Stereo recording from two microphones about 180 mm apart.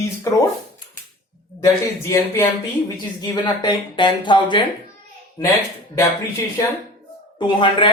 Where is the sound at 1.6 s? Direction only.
15° left (ahead or behind).